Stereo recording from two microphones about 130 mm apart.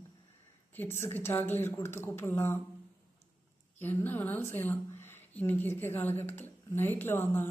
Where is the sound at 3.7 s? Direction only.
15° left (ahead or behind).